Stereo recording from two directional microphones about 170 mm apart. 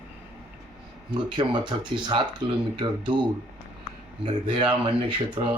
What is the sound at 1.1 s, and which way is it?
Speech, 25° right (ahead or behind).